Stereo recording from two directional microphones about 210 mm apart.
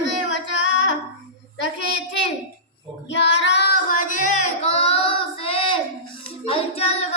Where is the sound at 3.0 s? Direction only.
55° left (ahead or behind).